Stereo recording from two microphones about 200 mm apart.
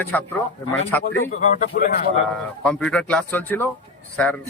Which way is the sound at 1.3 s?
35° left (ahead or behind).